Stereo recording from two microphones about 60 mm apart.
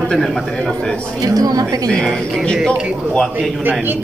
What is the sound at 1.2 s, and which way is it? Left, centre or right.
Speech, right.